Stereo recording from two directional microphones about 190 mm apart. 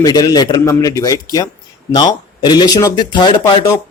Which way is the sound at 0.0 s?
20° left (ahead or behind).